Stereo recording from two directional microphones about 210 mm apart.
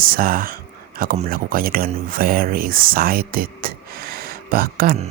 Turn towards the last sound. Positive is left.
turn(degrees=-45)  # may be behind; listen again after turning